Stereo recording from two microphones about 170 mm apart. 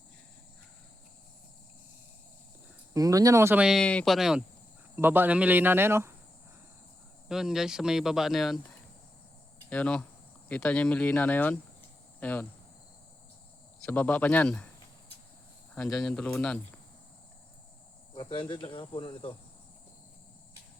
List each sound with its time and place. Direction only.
2.9 s speech: 20° right (ahead or behind)
7.3 s speech: 5° right (ahead or behind)
9.6 s speech: 10° left (ahead or behind)
13.8 s speech: 10° left (ahead or behind)
15.7 s speech: centre (ahead or behind)
18.1 s speech: 30° left (ahead or behind)